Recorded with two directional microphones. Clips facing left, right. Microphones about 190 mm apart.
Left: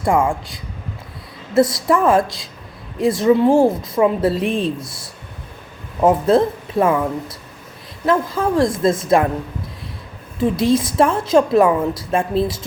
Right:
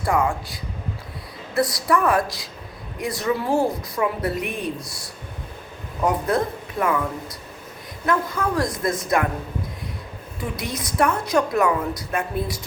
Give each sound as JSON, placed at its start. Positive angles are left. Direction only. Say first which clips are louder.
{"t": 0.0, "sound": "a woman's voice", "louder": "left 4 dB", "side_deg": 25}
{"t": 10.4, "sound": "a woman's voice", "louder": "left 14 dB", "side_deg": 25}